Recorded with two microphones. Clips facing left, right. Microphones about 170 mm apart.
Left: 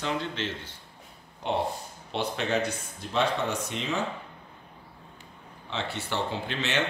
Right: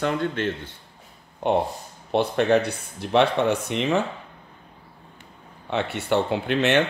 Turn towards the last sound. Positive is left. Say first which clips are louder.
# right 9 dB
turn(degrees=-60)  # may be behind; listen again after turning